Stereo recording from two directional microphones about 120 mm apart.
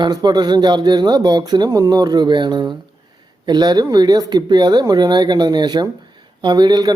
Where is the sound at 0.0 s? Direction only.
35° right (ahead or behind).